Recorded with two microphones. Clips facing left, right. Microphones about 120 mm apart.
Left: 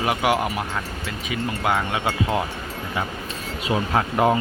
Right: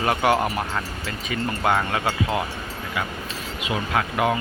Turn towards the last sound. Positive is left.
turn(degrees=30)  # may be behind; listen again after turning